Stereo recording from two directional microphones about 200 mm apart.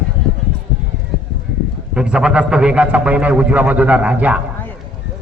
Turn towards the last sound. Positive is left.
turn(degrees=-5)  # may be behind; listen again after turning